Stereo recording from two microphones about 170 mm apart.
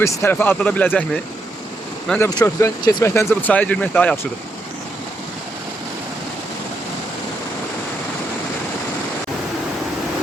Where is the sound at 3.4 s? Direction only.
10° left (ahead or behind).